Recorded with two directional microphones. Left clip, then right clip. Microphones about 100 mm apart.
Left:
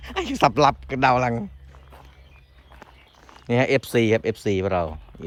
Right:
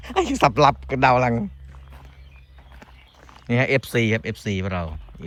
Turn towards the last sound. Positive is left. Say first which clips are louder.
# left 6 dB
turn(degrees=75)  # may be behind; listen again after turning